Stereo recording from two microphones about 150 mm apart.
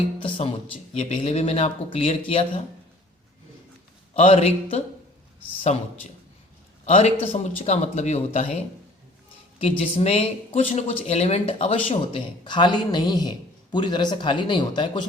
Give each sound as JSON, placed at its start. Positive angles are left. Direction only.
{"t": 0.2, "sound": "speech", "side_deg": 35}
{"t": 4.1, "sound": "speech", "side_deg": 40}
{"t": 9.6, "sound": "speech", "side_deg": 40}